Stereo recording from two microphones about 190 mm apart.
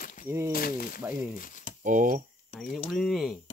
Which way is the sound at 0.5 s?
50° left (ahead or behind).